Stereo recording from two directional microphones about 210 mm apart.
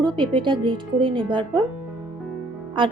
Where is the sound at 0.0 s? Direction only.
25° right (ahead or behind).